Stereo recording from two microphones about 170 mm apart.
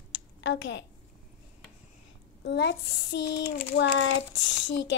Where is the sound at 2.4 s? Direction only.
85° left.